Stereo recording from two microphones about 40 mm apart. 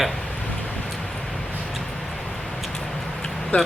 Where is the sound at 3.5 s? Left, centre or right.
Left.